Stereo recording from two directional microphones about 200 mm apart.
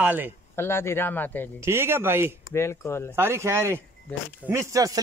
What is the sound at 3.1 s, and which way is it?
Speech, 10° right (ahead or behind).